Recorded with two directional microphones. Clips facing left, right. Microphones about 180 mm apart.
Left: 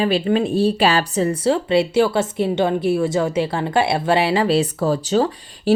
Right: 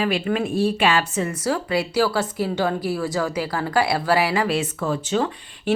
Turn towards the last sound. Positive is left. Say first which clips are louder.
# left 4 dB
turn(degrees=35)  # may be behind; listen again after turning